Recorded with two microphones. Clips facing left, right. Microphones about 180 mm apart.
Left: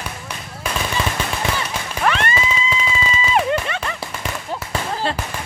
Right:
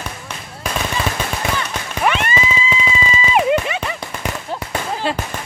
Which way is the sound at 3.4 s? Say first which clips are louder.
Right 4 dB; 10° right (ahead or behind).